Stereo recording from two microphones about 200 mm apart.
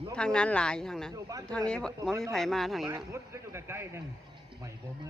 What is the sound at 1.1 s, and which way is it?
Speech, 15° right (ahead or behind).